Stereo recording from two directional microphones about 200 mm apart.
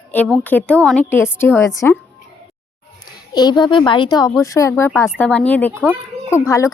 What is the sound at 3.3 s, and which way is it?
Speech, 20° left (ahead or behind).